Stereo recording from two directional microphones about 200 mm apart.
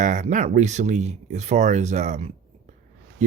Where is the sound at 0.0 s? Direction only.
40° right (ahead or behind).